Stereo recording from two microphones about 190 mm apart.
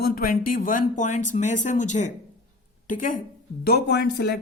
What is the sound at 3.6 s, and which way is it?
Speech, 55° left (ahead or behind).